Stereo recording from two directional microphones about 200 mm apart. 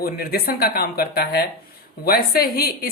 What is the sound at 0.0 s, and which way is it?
A woman's voice, 50° left (ahead or behind).